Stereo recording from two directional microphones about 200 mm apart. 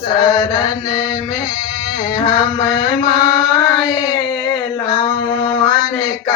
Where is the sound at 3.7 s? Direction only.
20° left (ahead or behind).